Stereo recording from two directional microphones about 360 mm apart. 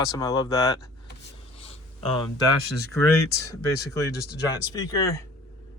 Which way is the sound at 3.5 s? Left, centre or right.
Centre.